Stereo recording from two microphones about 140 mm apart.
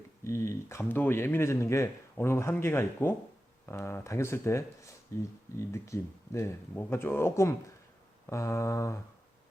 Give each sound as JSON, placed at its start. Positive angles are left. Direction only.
{"t": 0.3, "sound": "speech", "side_deg": 20}